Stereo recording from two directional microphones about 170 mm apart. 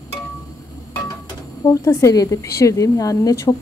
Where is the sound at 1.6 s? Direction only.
20° left (ahead or behind).